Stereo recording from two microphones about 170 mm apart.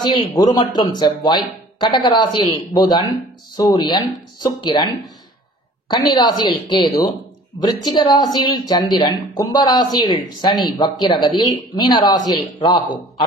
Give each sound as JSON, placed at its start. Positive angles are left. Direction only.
{"t": 0.0, "sound": "a woman's voice", "side_deg": 25}